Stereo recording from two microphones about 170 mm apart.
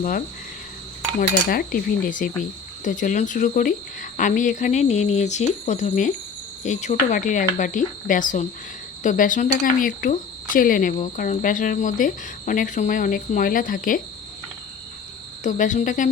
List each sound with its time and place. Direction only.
1.5 s speech: 60° left (ahead or behind)
2.8 s cricket: 50° left (ahead or behind)
15.4 s cricket: 50° left (ahead or behind)